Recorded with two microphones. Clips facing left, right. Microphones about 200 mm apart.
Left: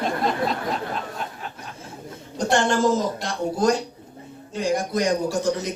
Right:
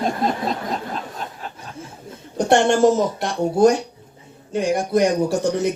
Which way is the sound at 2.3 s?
60° right (ahead or behind).